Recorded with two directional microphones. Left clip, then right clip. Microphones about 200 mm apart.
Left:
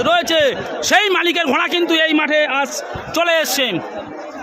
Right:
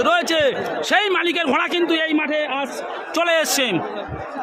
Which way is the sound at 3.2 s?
5° left (ahead or behind).